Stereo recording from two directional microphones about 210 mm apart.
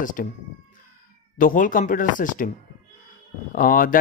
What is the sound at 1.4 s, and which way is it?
Speech, 40° left (ahead or behind).